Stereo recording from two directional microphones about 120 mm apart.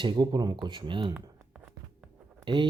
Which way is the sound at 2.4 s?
40° right (ahead or behind).